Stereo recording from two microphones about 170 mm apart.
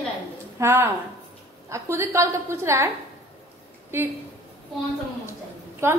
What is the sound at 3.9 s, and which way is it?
Speech, 15° right (ahead or behind).